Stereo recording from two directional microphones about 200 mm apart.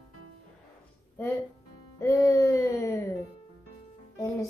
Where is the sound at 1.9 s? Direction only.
15° left (ahead or behind).